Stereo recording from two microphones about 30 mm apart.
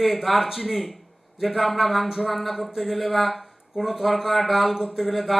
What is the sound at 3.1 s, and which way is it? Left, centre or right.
Speech, centre.